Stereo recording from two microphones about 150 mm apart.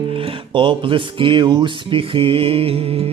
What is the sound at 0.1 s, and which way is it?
Music, 35° right (ahead or behind).